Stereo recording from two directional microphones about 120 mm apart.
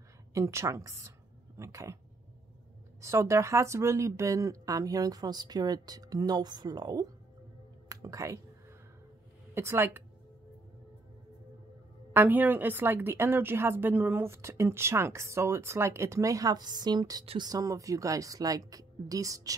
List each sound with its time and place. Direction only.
0.3 s a woman's voice: 25° right (ahead or behind)
3.0 s speech: 25° right (ahead or behind)
9.5 s a woman's voice: 20° right (ahead or behind)
12.1 s a woman's voice: 15° right (ahead or behind)